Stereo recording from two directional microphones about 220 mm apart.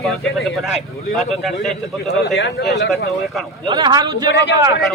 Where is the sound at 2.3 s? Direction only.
50° left (ahead or behind).